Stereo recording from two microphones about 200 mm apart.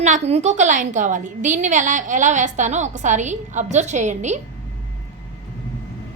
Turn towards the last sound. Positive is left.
turn(degrees=-35)  # may be behind; listen again after turning